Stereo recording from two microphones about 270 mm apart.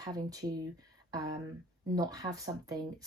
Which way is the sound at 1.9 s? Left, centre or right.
Centre.